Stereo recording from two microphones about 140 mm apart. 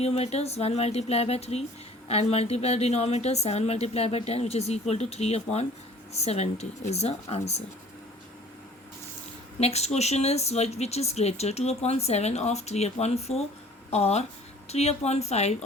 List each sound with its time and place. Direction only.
0.0 s speech: 50° left (ahead or behind)
9.6 s speech: 50° left (ahead or behind)